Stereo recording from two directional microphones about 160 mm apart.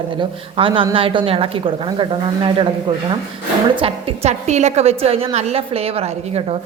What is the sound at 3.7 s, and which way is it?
A woman's voice, 35° right (ahead or behind).